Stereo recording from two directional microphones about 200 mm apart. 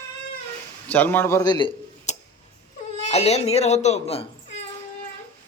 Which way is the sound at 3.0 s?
30° left (ahead or behind).